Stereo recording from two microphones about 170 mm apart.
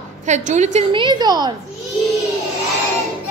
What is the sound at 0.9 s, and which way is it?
Speech, 25° right (ahead or behind).